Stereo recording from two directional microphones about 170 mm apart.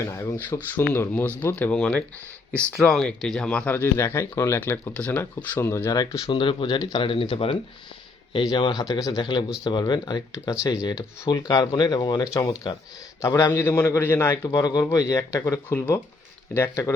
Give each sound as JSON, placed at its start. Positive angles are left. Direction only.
{"t": 0.3, "sound": "speech", "side_deg": 10}